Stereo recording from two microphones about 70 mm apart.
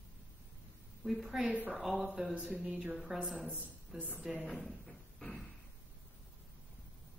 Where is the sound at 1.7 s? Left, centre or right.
Centre.